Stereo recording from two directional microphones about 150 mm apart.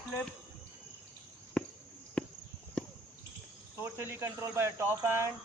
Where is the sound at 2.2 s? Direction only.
5° left (ahead or behind).